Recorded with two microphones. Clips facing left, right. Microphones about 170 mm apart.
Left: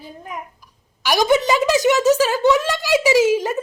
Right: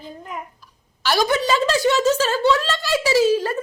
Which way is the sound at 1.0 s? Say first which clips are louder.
Left 3 dB; 15° left (ahead or behind).